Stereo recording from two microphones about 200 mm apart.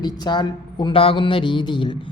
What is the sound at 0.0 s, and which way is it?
Speech, 20° left (ahead or behind).